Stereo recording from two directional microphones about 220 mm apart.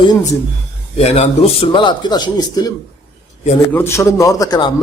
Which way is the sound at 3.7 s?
10° left (ahead or behind).